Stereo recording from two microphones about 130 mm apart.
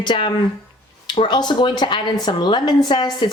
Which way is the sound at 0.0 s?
40° left (ahead or behind).